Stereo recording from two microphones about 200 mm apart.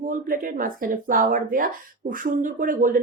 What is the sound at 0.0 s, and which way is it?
Speech, 45° right (ahead or behind).